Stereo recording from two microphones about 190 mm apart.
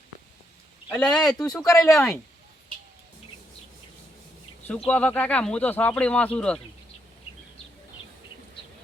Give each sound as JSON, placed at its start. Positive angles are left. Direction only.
{"t": 0.9, "sound": "speech", "side_deg": 5}
{"t": 1.6, "sound": "speech", "side_deg": 15}
{"t": 1.9, "sound": "speech", "side_deg": 0}
{"t": 4.9, "sound": "speech", "side_deg": 10}